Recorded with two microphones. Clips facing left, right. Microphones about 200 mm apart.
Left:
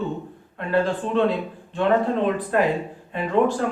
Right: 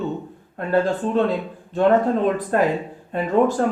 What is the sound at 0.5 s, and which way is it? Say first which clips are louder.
Speech: right 2 dB; 45° right (ahead or behind).